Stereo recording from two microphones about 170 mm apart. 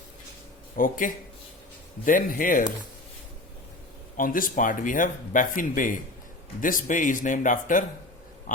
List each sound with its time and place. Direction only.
0.8 s speech: 50° left (ahead or behind)
4.2 s speech: 55° left (ahead or behind)